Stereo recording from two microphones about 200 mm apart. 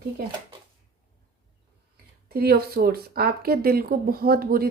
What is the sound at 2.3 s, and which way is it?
Speech, 50° right (ahead or behind).